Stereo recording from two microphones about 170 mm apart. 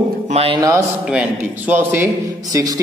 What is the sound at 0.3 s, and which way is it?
Speech, 35° right (ahead or behind).